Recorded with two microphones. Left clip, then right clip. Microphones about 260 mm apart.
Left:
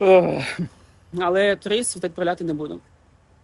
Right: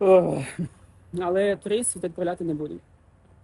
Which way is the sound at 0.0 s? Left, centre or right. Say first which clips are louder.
Left 3 dB; centre.